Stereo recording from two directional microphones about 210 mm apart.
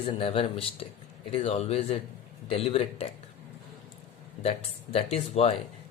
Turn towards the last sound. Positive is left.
turn(degrees=30)  # may be behind; listen again after turning